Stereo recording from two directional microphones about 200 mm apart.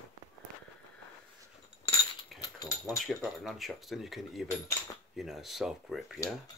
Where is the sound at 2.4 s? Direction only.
15° left (ahead or behind).